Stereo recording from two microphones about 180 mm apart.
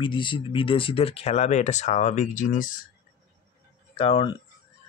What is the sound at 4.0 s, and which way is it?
Speech, 30° left (ahead or behind).